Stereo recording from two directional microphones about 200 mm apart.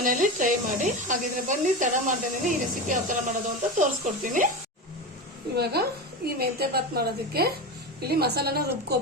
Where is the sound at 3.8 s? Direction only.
40° right (ahead or behind).